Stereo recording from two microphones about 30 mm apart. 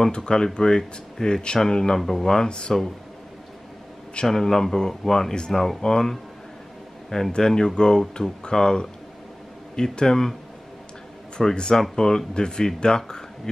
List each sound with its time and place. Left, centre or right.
0.1 s speech: left
2.0 s speech: centre
2.2 s speech: left
4.3 s speech: centre
5.8 s speech: left
7.3 s speech: left
9.9 s speech: centre
11.3 s speech: left